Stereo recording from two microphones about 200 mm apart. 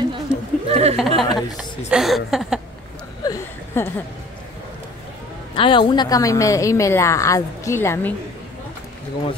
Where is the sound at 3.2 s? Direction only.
15° left (ahead or behind).